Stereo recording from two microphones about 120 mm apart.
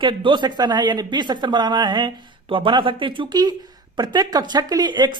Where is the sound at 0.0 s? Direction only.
45° right (ahead or behind).